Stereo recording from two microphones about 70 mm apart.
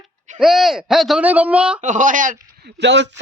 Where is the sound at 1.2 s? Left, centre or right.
Right.